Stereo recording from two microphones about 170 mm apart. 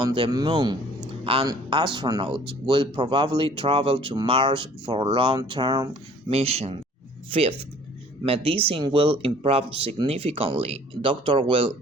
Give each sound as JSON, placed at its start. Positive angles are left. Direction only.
{"t": 0.0, "sound": "speech", "side_deg": -30}